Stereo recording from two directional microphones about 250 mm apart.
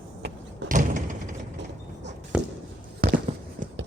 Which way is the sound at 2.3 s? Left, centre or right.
Centre.